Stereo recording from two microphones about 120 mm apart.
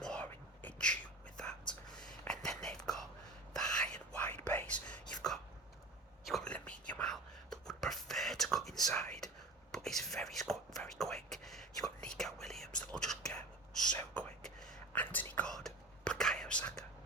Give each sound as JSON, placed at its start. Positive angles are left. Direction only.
{"t": 0.0, "sound": "whispering", "side_deg": 5}
{"t": 6.2, "sound": "whispering", "side_deg": 5}